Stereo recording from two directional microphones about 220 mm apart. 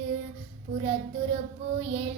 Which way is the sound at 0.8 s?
25° right (ahead or behind).